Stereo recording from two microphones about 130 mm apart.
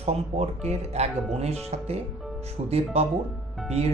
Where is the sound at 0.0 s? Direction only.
55° right (ahead or behind).